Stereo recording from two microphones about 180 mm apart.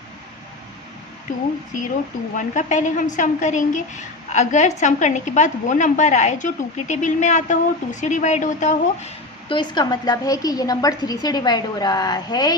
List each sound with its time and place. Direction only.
1.3 s a woman's voice: 45° left (ahead or behind)
9.6 s a woman's voice: 25° left (ahead or behind)